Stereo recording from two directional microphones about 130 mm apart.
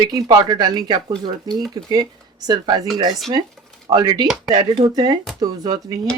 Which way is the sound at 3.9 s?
35° right (ahead or behind).